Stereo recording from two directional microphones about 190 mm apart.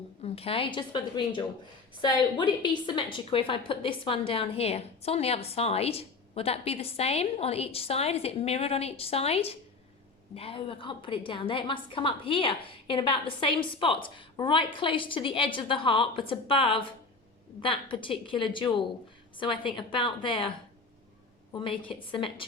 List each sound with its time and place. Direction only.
0.2 s a woman's voice: 30° left (ahead or behind)
21.5 s a woman's voice: 25° left (ahead or behind)